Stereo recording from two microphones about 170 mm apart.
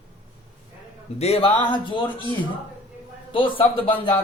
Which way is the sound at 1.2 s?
35° left (ahead or behind).